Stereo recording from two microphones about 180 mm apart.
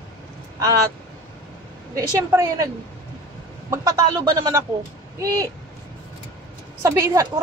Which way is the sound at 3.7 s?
20° right (ahead or behind).